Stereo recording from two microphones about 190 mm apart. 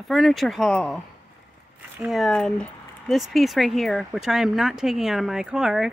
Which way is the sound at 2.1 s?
Centre (ahead or behind).